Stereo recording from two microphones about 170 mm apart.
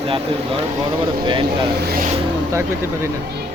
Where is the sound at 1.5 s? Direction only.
65° right (ahead or behind).